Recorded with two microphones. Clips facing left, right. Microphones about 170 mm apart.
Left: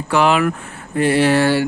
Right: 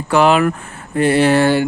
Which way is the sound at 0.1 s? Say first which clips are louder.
Right 3 dB; 40° right (ahead or behind).